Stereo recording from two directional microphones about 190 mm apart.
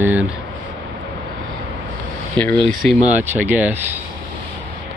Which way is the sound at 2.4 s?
5° left (ahead or behind).